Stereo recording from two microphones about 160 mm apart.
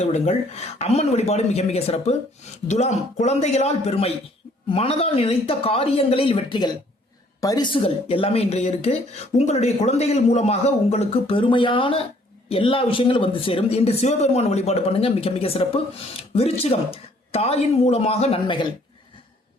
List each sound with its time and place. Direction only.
0.0 s speech: 45° left (ahead or behind)